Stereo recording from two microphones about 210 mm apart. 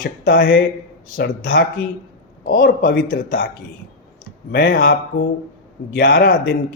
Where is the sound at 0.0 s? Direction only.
50° left (ahead or behind).